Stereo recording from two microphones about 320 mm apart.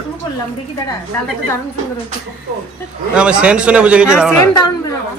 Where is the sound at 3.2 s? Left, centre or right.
Centre.